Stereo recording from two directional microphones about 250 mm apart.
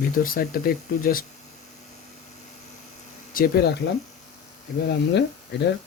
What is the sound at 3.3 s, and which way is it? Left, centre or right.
Speech, left.